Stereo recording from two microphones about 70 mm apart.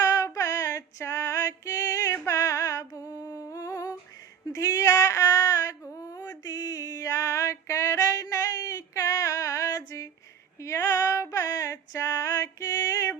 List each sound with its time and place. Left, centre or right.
0.0 s female singing: left
2.2 s a sound: left
4.5 s female singing: left
6.4 s female singing: left